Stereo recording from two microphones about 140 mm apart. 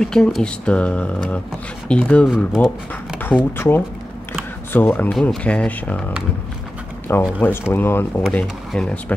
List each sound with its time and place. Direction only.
0.0 s speech: 5° left (ahead or behind)
2.2 s speech: 5° right (ahead or behind)
3.2 s speech: 15° left (ahead or behind)
4.3 s a sound: 15° left (ahead or behind)
5.3 s speech: 5° left (ahead or behind)